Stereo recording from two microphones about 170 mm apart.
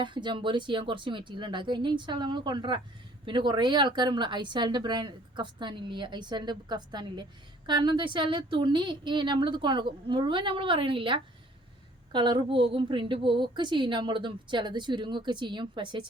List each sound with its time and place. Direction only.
0.0 s a woman's voice: 30° right (ahead or behind)